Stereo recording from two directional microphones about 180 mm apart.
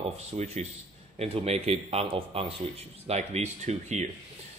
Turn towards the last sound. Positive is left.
turn(degrees=-40)  # may be behind; listen again after turning